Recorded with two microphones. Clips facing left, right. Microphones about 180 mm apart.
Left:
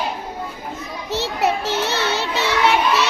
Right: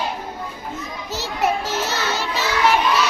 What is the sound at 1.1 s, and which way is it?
Child singing, 65° left (ahead or behind).